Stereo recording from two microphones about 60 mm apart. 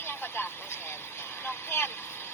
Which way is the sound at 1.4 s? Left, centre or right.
Left.